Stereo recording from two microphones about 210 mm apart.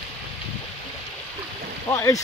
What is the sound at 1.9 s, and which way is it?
Speech, 15° left (ahead or behind).